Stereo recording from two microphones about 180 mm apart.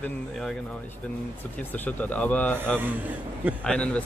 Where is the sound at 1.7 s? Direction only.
10° left (ahead or behind).